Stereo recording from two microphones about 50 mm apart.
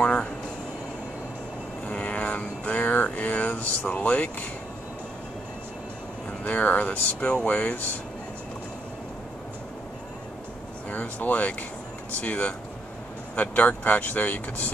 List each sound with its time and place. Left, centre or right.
0.0 s a sound: left
1.9 s mantra: left
6.4 s air conditioning: left
7.3 s speech: left
10.9 s speech: left